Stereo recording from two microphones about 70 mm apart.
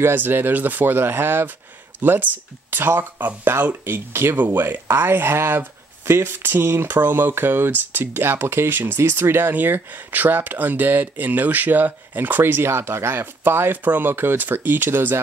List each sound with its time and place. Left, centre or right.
0.0 s speech: right